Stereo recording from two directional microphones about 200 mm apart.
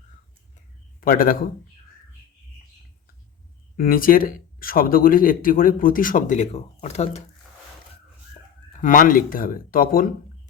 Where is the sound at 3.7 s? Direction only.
45° left (ahead or behind).